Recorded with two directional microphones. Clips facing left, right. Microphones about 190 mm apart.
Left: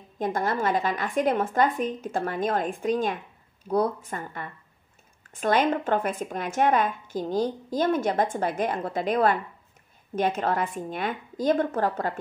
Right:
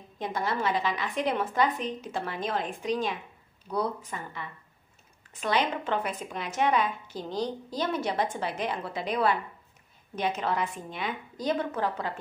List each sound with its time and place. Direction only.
0.2 s speech: 50° left (ahead or behind)